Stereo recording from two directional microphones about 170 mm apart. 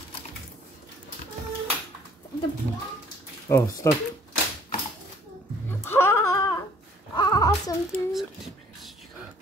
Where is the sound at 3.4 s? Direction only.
20° left (ahead or behind).